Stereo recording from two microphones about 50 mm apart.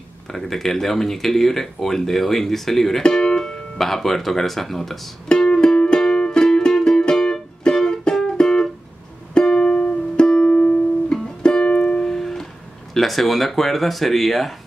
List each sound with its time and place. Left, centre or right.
0.3 s speech: centre
5.3 s music: centre
12.9 s speech: centre